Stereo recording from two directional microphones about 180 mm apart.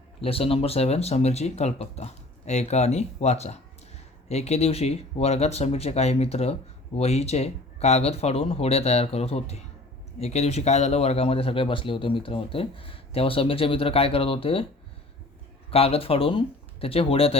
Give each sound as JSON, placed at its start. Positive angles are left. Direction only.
{"t": 0.2, "sound": "speech", "side_deg": 35}
{"t": 15.7, "sound": "speech", "side_deg": 35}